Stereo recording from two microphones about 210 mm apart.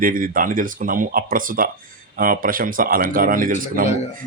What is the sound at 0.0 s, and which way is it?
Speech, 40° right (ahead or behind).